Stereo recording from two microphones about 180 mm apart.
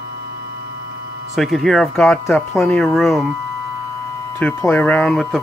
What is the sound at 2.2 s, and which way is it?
Speech, 15° left (ahead or behind).